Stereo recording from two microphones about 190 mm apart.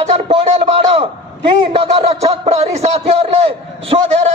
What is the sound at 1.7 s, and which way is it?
A man's voice, 30° right (ahead or behind).